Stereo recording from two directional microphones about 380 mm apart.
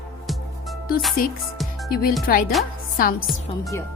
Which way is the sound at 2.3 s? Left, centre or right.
Left.